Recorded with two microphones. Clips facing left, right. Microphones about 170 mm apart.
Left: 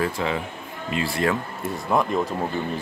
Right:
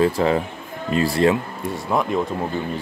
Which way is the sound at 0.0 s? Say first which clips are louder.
Right 7 dB; 35° right (ahead or behind).